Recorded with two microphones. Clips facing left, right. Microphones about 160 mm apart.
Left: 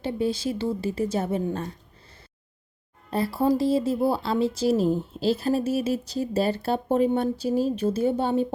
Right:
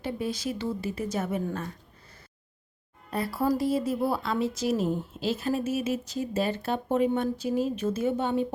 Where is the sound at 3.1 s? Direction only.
30° left (ahead or behind).